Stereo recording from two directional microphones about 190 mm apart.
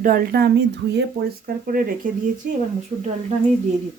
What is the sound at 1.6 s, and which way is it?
Speech, 45° right (ahead or behind).